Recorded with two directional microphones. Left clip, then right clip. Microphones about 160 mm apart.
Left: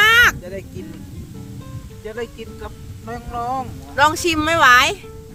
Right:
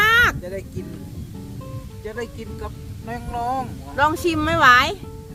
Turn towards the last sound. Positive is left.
turn(degrees=25)  # may be behind; listen again after turning